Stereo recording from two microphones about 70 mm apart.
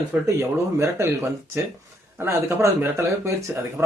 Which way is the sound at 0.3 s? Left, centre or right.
Right.